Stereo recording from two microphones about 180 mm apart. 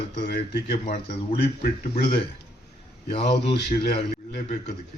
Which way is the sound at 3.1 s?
30° left (ahead or behind).